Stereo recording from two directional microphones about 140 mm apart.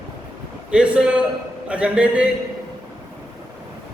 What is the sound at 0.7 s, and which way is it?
A man's voice, 5° right (ahead or behind).